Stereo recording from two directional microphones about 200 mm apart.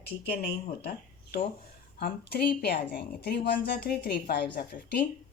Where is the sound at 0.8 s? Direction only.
50° left (ahead or behind).